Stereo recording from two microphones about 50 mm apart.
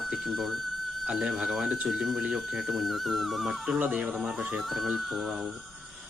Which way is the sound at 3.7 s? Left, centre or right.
Right.